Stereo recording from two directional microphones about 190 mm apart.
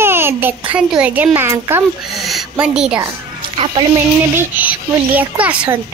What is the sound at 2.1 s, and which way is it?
Speech, centre (ahead or behind).